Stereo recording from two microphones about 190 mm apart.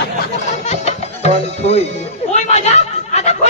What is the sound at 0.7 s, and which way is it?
Music, 35° left (ahead or behind).